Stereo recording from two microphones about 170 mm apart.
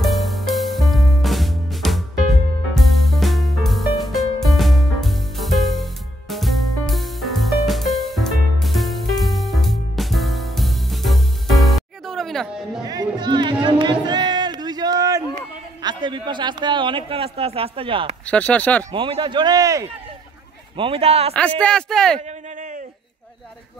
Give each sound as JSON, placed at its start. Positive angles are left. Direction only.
{"t": 0.0, "sound": "music", "side_deg": 0}
{"t": 12.8, "sound": "music", "side_deg": -20}
{"t": 15.3, "sound": "a sound", "side_deg": -25}
{"t": 18.2, "sound": "speech", "side_deg": 5}
{"t": 18.9, "sound": "speech", "side_deg": -30}
{"t": 20.7, "sound": "a man's voice", "side_deg": -35}
{"t": 21.4, "sound": "speech", "side_deg": 5}
{"t": 22.2, "sound": "a sound", "side_deg": -50}